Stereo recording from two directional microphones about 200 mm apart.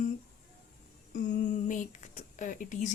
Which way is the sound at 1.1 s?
40° left (ahead or behind).